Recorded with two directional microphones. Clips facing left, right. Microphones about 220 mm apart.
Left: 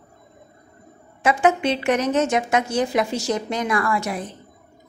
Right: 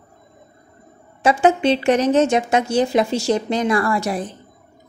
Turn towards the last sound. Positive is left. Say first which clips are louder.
# right 3 dB
turn(degrees=-35)  # may be behind; listen again after turning